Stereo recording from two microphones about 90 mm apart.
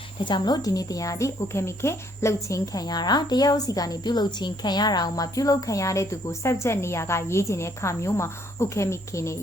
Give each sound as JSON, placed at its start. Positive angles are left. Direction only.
{"t": 0.3, "sound": "a woman's voice", "side_deg": 55}
{"t": 2.7, "sound": "a woman's voice", "side_deg": 50}